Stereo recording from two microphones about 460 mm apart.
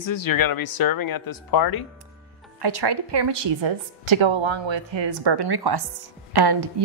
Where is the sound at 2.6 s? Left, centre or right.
Right.